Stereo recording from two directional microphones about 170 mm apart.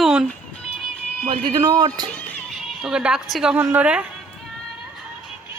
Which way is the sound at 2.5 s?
5° right (ahead or behind).